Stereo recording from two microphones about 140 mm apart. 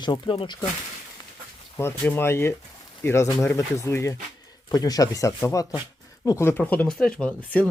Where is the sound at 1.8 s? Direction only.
15° left (ahead or behind).